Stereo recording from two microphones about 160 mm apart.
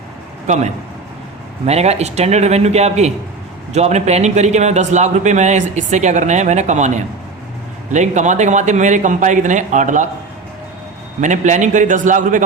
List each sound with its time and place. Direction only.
0.4 s a man's voice: 45° right (ahead or behind)
11.2 s a man's voice: 50° right (ahead or behind)